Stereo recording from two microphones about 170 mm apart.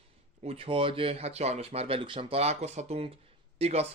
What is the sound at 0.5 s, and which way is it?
Speech, 30° right (ahead or behind).